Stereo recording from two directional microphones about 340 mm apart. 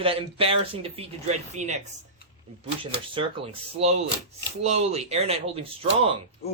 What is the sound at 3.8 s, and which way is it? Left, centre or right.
Speech, centre.